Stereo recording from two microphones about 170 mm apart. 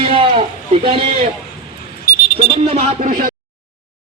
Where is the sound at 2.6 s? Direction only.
35° right (ahead or behind).